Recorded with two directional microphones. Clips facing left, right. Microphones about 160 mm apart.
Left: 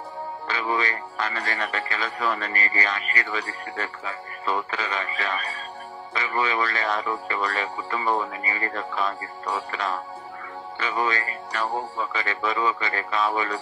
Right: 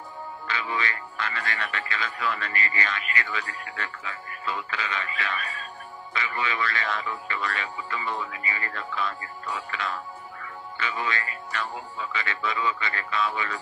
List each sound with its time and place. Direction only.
0.5 s speech: 40° left (ahead or behind)